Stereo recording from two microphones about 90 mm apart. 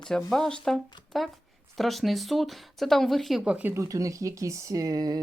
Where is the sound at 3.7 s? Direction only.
35° right (ahead or behind).